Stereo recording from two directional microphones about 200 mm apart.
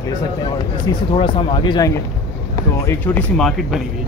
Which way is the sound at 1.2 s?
25° left (ahead or behind).